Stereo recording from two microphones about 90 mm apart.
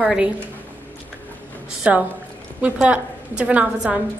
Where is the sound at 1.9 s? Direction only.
15° right (ahead or behind).